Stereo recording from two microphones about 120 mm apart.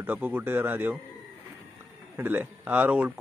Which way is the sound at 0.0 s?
15° right (ahead or behind).